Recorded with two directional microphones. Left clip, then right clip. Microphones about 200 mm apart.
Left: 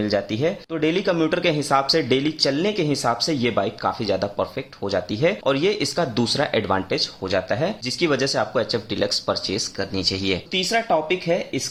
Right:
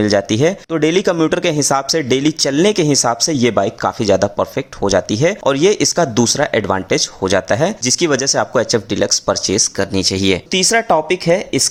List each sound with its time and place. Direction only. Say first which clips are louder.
0.0 s speech: right 8 dB; 40° right (ahead or behind)